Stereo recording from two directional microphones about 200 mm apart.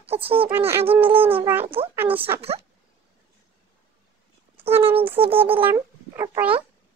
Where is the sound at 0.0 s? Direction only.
30° right (ahead or behind).